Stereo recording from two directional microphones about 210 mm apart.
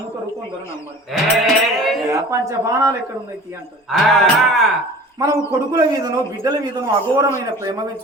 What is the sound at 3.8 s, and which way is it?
Speech, centre (ahead or behind).